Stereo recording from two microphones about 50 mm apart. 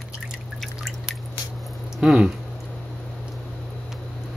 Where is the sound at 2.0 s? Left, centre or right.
Right.